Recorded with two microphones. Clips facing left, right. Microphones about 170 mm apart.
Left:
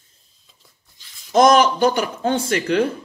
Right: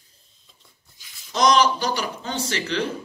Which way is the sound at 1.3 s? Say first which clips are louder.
Left 5 dB; 50° left (ahead or behind).